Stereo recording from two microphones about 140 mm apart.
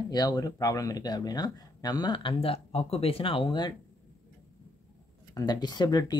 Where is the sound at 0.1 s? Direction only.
25° left (ahead or behind).